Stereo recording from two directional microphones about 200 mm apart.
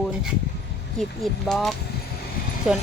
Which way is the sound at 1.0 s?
Centre (ahead or behind).